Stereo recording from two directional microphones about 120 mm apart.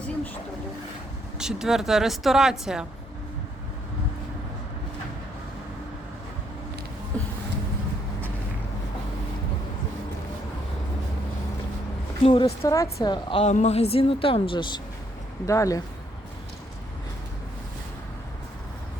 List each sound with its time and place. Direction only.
1.4 s speech: 5° right (ahead or behind)
7.1 s a sound: 10° left (ahead or behind)
12.3 s speech: 40° left (ahead or behind)
12.7 s speech: 25° left (ahead or behind)
13.1 s speech: 40° left (ahead or behind)
13.4 s speech: 70° left (ahead or behind); by 14.8 s 45° left (ahead or behind)
15.4 s speech: 25° left (ahead or behind)